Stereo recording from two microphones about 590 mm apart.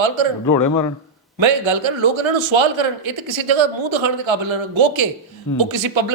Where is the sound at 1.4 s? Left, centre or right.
Right.